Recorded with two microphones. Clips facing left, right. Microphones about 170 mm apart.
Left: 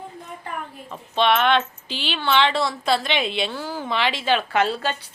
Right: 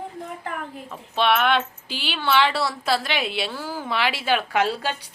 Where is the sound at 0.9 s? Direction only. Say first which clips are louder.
Left 2 dB; 5° right (ahead or behind).